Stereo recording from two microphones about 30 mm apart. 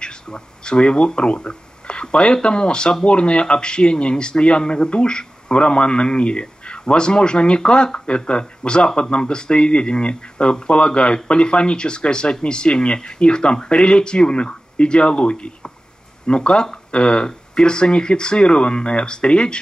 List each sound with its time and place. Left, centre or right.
0.0 s speech: left